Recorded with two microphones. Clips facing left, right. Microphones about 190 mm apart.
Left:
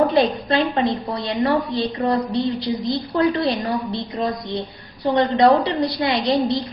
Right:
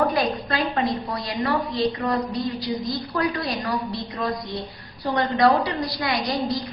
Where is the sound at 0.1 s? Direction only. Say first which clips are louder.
Left 6 dB; 25° left (ahead or behind).